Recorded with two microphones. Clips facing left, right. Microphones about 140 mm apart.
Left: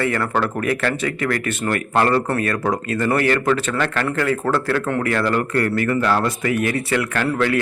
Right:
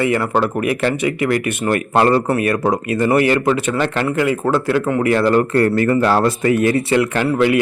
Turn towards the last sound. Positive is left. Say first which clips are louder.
# right 4 dB
turn(degrees=-20)  # may be behind; listen again after turning